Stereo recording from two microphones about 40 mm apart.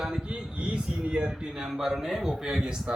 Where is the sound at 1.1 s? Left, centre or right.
Right.